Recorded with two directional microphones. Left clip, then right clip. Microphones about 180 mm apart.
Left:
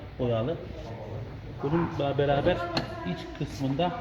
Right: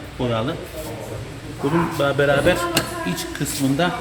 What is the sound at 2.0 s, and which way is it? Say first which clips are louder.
Speech: right 9 dB; 20° left (ahead or behind).